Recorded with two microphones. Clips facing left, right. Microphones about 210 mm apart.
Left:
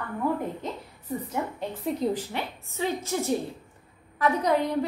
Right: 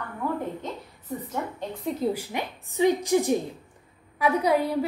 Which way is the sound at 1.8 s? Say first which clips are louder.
Even; centre (ahead or behind).